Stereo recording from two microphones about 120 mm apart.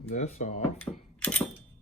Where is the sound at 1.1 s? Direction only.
10° left (ahead or behind).